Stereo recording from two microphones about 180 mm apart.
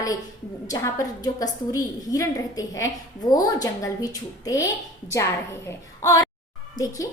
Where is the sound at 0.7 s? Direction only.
20° left (ahead or behind).